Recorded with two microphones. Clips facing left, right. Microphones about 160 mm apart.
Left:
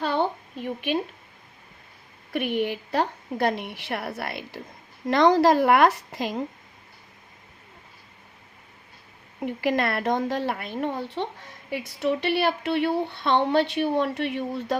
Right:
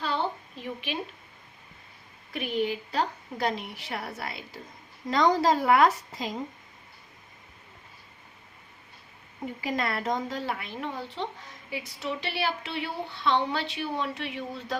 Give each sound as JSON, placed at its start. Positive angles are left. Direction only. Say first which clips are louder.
{"t": 0.0, "sound": "a sound", "louder": "left 5 dB", "side_deg": 55}
{"t": 2.3, "sound": "speech", "louder": "left 3 dB", "side_deg": 60}
{"t": 9.5, "sound": "speech", "louder": "left 6 dB", "side_deg": 70}